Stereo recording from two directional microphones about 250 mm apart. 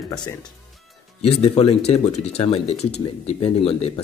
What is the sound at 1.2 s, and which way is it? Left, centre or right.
Speech, left.